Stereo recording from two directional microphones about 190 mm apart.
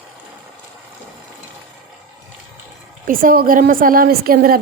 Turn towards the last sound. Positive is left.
turn(degrees=-50)  # may be behind; listen again after turning